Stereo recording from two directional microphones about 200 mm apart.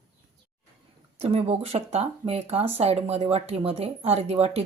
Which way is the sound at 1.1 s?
30° right (ahead or behind).